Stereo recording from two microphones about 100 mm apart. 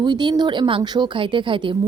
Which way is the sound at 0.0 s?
45° right (ahead or behind).